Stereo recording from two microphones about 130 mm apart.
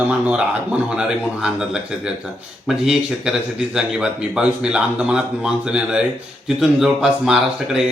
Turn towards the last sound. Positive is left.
turn(degrees=-5)  # may be behind; listen again after turning